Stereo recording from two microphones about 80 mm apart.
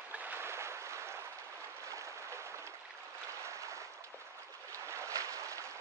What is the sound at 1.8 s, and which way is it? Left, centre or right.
Applause, right.